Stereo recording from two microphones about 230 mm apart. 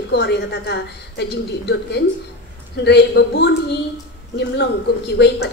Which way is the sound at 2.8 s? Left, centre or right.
Left.